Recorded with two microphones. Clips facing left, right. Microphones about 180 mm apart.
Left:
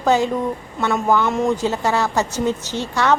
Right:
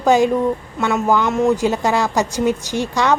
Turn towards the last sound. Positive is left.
turn(degrees=-15)  # may be behind; listen again after turning